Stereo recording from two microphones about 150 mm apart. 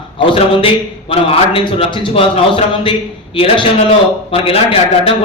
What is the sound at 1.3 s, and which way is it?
A man's voice, 40° left (ahead or behind).